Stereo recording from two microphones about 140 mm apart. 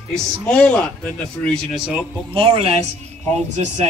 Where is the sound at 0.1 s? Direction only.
5° left (ahead or behind).